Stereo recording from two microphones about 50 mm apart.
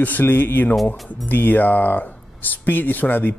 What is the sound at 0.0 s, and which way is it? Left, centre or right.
Speech, left.